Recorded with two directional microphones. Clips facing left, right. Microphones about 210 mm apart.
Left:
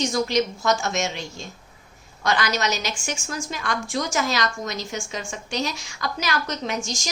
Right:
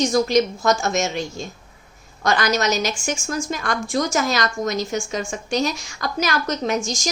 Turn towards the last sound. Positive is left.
turn(degrees=-45)  # may be behind; listen again after turning